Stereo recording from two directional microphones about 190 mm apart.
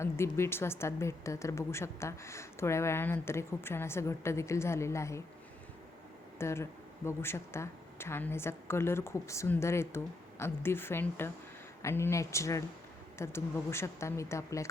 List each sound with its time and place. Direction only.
0.0 s a woman's voice: 15° left (ahead or behind)
6.4 s a woman's voice: 15° left (ahead or behind)